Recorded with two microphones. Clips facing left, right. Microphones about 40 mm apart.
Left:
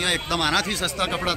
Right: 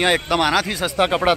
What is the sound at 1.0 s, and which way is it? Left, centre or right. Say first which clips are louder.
Speech: right 9 dB; right.